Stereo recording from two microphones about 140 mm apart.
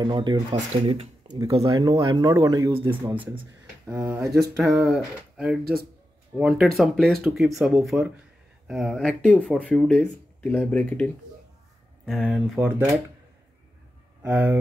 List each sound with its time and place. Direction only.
0.0 s speech: 30° right (ahead or behind)
1.4 s speech: 25° right (ahead or behind)
2.8 s speech: 15° right (ahead or behind)
4.8 s speech: 5° right (ahead or behind)
12.1 s speech: centre (ahead or behind)
12.5 s speech: 10° right (ahead or behind)
14.2 s speech: 15° right (ahead or behind)